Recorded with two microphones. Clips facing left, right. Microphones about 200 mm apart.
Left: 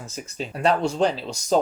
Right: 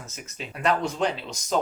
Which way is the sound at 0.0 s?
35° left (ahead or behind).